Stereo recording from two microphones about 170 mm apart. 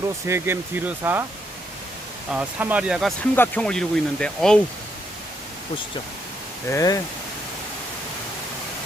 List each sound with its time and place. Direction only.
0.3 s speech: 15° right (ahead or behind)
2.3 s speech: 10° right (ahead or behind)
3.3 s speech: 10° left (ahead or behind)
6.7 s speech: 20° left (ahead or behind)